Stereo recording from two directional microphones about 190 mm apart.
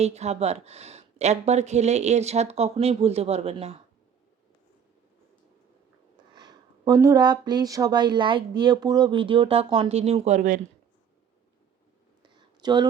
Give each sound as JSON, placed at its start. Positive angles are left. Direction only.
{"t": 0.0, "sound": "speech", "side_deg": -35}
{"t": 6.3, "sound": "speech", "side_deg": -20}
{"t": 12.6, "sound": "speech", "side_deg": -20}